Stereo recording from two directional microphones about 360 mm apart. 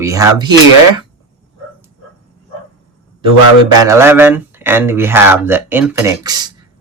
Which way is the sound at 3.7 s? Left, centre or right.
Centre.